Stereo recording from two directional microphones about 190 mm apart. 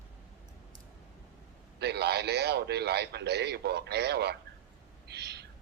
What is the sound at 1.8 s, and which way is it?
A man's voice, 60° right (ahead or behind).